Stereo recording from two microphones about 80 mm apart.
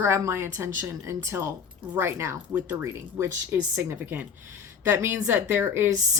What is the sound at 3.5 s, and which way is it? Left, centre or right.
Speech, right.